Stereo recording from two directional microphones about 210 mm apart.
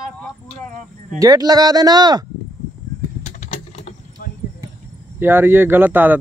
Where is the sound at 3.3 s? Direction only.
30° left (ahead or behind).